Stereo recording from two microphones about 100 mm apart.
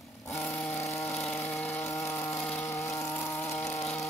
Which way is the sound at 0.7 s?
30° left (ahead or behind).